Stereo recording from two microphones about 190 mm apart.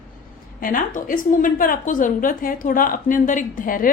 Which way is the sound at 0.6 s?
45° left (ahead or behind).